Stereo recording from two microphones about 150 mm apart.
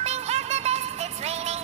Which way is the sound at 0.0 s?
45° right (ahead or behind).